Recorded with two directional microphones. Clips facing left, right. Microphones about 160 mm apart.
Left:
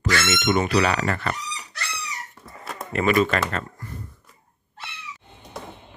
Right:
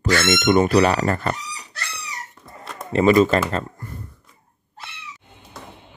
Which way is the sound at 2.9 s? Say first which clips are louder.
Right 6 dB; 30° right (ahead or behind).